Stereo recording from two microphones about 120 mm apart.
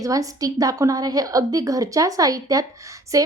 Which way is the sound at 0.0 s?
30° right (ahead or behind).